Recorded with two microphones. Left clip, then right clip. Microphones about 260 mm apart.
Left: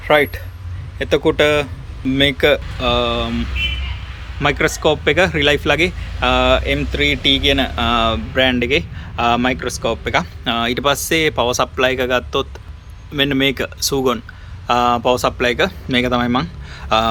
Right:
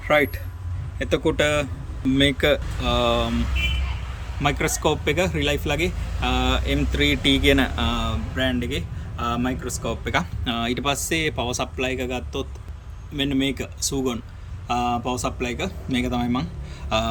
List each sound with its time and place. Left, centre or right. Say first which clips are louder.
0.0 s a man's voice: left 6 dB; centre
4.4 s a man's voice: left 7 dB; centre